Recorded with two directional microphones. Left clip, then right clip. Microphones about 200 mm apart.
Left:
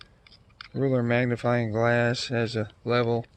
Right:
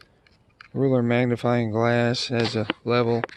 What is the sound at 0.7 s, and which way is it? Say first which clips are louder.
Speech: right 3 dB; 40° right (ahead or behind).